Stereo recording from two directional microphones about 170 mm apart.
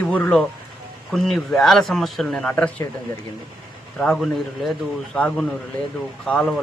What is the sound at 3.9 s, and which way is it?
A man's voice, 5° left (ahead or behind).